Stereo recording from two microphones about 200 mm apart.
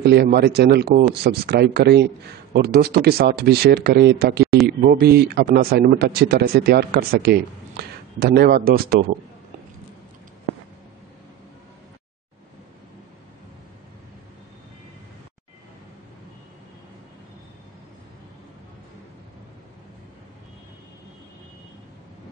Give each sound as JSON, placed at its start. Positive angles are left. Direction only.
{"t": 0.0, "sound": "speech", "side_deg": -55}